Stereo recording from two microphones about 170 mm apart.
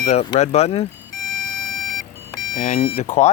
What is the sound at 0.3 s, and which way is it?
Speech, 40° left (ahead or behind).